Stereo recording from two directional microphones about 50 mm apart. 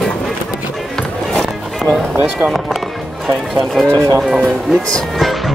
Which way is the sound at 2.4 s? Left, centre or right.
Centre.